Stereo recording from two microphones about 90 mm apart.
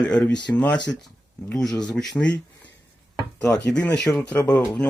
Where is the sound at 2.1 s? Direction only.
15° left (ahead or behind).